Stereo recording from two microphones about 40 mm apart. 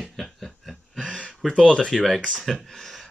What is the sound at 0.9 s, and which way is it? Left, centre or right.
Speech, left.